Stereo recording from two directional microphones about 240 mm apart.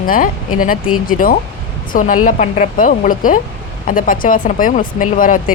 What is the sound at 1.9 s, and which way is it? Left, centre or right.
Speech, left.